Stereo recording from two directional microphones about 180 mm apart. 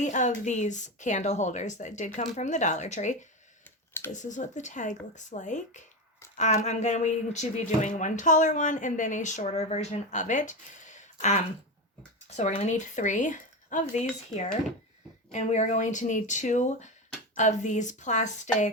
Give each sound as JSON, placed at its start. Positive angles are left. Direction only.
{"t": 0.0, "sound": "speech", "side_deg": 40}
{"t": 15.3, "sound": "speech", "side_deg": 40}